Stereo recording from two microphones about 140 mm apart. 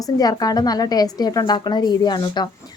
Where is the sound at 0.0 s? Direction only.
30° left (ahead or behind).